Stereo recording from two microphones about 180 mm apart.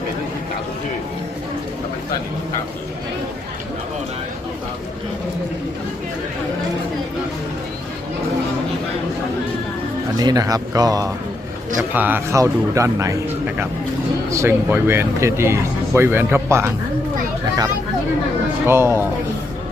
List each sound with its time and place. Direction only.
10.2 s speech: 20° right (ahead or behind)
14.3 s speech: 15° right (ahead or behind)
18.6 s speech: 15° right (ahead or behind)